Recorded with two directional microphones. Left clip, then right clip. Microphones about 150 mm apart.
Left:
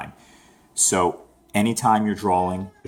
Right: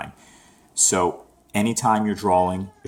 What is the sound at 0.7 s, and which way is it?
Speech, 5° left (ahead or behind).